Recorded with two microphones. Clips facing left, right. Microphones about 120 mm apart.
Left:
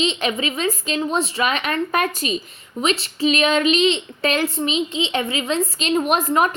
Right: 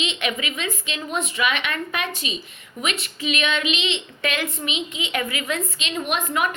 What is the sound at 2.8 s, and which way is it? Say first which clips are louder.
A woman's voice: left 7 dB; 30° left (ahead or behind).